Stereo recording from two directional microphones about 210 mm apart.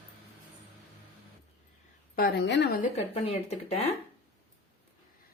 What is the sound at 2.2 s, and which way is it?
Speech, 50° left (ahead or behind).